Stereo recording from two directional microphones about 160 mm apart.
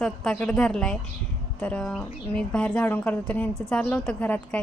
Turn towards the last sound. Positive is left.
turn(degrees=5)  # may be behind; listen again after turning